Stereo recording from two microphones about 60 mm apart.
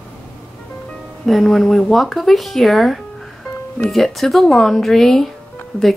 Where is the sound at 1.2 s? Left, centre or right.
Centre.